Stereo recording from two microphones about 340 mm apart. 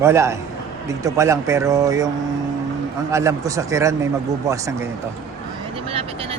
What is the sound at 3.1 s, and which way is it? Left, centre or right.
Speech, centre.